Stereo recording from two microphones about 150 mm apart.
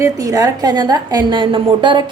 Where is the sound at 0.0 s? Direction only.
25° right (ahead or behind).